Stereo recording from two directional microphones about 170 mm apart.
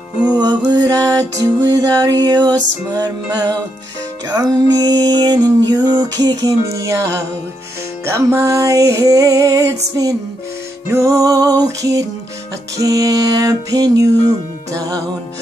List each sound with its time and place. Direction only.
0.4 s music: 25° right (ahead or behind)
10.9 s music: 20° right (ahead or behind)